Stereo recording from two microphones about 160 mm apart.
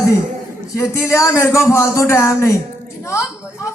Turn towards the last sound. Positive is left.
turn(degrees=20)  # may be behind; listen again after turning